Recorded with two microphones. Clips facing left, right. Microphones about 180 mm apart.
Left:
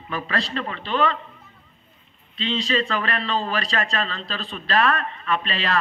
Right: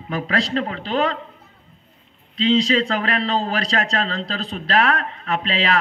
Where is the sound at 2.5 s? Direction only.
90° right.